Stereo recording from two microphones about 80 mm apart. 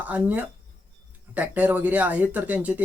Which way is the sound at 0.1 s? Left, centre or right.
Centre.